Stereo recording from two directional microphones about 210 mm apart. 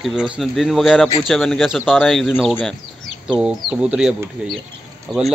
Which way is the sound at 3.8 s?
5° right (ahead or behind).